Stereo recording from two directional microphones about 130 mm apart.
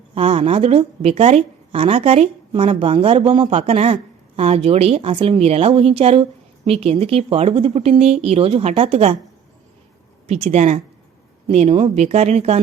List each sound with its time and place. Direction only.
0.1 s a woman's voice: 45° right (ahead or behind)
10.2 s a woman's voice: 50° right (ahead or behind)